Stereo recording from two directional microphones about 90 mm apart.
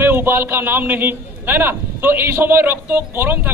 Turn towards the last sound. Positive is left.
turn(degrees=-25)  # may be behind; listen again after turning